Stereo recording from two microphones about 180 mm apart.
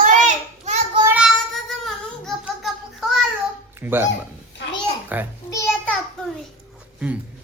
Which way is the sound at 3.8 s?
10° right (ahead or behind).